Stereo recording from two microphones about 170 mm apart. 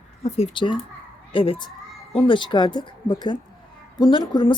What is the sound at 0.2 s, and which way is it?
Speech, 35° left (ahead or behind).